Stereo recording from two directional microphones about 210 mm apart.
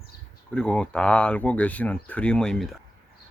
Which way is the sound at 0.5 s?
5° left (ahead or behind).